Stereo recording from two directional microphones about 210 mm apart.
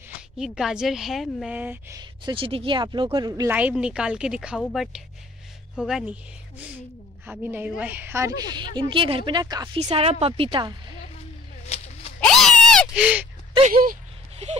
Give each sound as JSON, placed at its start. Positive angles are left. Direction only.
{"t": 0.4, "sound": "a woman's voice", "side_deg": 0}
{"t": 3.5, "sound": "a woman's voice", "side_deg": -5}
{"t": 7.2, "sound": "a woman's voice", "side_deg": -10}
{"t": 8.5, "sound": "speech", "side_deg": -20}
{"t": 9.8, "sound": "speech", "side_deg": -30}
{"t": 11.6, "sound": "a sound", "side_deg": 30}
{"t": 12.2, "sound": "cat", "side_deg": 5}
{"t": 14.3, "sound": "a sound", "side_deg": -30}